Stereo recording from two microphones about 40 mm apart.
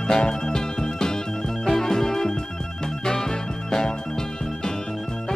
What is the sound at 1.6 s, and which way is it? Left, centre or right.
Organ, centre.